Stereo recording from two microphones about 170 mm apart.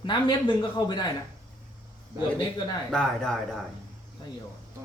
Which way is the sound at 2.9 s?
5° left (ahead or behind).